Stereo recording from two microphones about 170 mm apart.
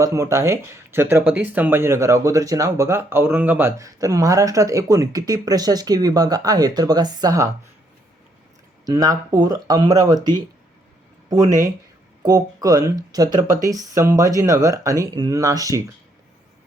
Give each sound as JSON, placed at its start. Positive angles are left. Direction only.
{"t": 0.0, "sound": "speech", "side_deg": -20}
{"t": 8.9, "sound": "speech", "side_deg": -20}
{"t": 11.4, "sound": "speech", "side_deg": -50}
{"t": 12.2, "sound": "speech", "side_deg": -20}